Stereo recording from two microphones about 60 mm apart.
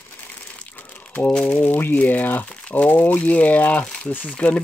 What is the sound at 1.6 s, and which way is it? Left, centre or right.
Speech, left.